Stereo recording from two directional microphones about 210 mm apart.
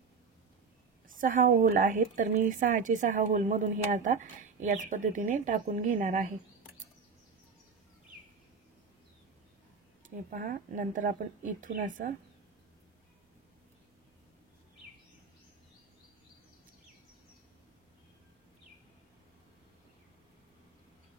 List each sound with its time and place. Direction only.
1.0 s speech: 40° right (ahead or behind)
10.0 s speech: 40° right (ahead or behind)